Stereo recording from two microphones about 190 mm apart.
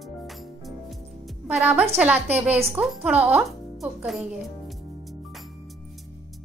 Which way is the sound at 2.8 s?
5° right (ahead or behind).